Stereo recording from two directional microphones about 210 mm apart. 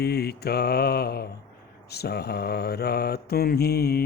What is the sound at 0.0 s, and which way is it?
Mantra, 50° left (ahead or behind).